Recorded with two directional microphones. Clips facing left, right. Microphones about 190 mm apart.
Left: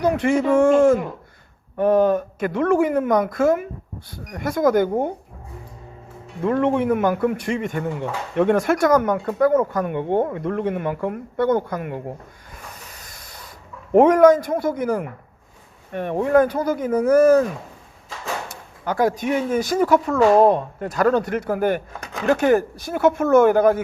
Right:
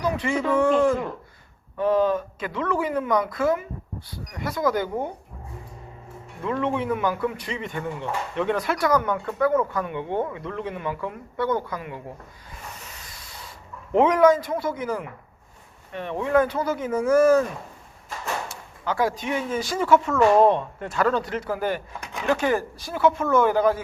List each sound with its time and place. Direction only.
0.0 s speech: 55° left (ahead or behind)
6.4 s speech: 50° left (ahead or behind)
13.0 s sanding: 45° left (ahead or behind)
13.9 s speech: 45° left (ahead or behind)
18.9 s speech: 45° left (ahead or behind)